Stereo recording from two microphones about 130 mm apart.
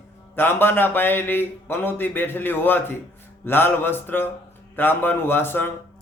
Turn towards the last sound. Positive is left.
turn(degrees=15)  # may be behind; listen again after turning